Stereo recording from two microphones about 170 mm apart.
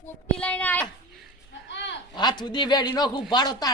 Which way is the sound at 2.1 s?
25° left (ahead or behind).